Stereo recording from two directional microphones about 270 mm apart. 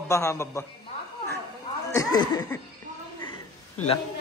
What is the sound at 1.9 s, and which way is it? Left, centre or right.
Speech, centre.